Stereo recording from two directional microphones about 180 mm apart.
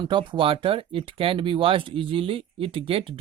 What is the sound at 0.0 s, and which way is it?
Speech, 25° right (ahead or behind).